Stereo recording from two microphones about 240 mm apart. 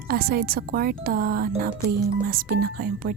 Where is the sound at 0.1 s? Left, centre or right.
Right.